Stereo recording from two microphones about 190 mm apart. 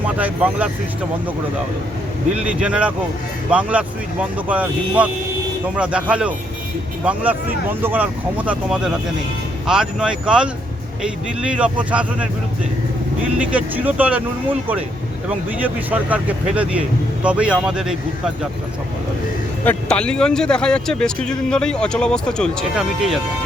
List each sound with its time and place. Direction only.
0.0 s speech: 10° right (ahead or behind)
2.3 s speech: 5° right (ahead or behind)
13.4 s speech: 5° right (ahead or behind)
15.3 s speech: 10° right (ahead or behind)
19.6 s speech: 5° left (ahead or behind)